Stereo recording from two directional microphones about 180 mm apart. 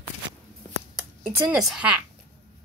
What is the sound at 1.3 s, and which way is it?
Speech, 5° right (ahead or behind).